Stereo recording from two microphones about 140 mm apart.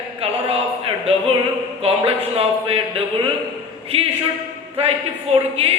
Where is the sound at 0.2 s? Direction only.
45° right (ahead or behind).